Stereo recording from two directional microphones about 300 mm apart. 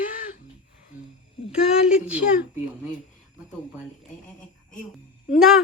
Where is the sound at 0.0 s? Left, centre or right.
Left.